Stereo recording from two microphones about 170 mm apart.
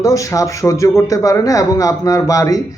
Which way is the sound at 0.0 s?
20° left (ahead or behind).